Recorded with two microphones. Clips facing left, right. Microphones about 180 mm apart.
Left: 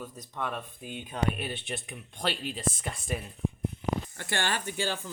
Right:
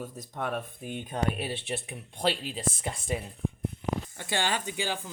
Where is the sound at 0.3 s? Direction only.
50° right (ahead or behind).